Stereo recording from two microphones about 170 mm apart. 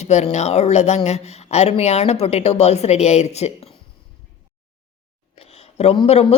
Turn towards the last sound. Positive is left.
turn(degrees=35)  # may be behind; listen again after turning